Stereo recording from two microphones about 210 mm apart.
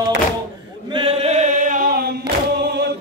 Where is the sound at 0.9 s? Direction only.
25° right (ahead or behind).